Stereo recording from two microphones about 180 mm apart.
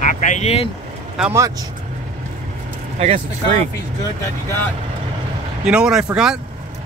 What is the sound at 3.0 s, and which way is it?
Speech, 35° right (ahead or behind).